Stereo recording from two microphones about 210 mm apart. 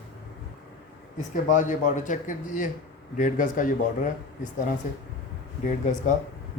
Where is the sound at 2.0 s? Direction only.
35° left (ahead or behind).